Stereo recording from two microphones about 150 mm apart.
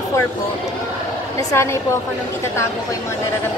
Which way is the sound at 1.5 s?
20° left (ahead or behind).